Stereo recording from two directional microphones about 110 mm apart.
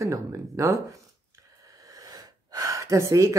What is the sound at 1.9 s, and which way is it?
Gasp, 35° right (ahead or behind).